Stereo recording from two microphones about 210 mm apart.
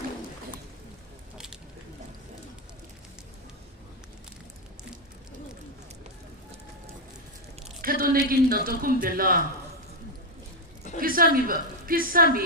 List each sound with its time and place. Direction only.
7.8 s a woman's voice: 45° right (ahead or behind)
11.0 s a woman's voice: 45° right (ahead or behind)